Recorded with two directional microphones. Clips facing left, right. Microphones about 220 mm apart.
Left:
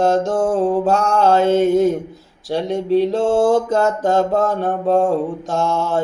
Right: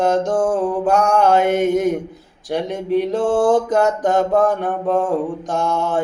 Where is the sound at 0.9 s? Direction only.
15° right (ahead or behind).